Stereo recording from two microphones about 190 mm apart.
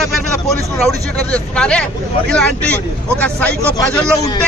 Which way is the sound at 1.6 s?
5° left (ahead or behind).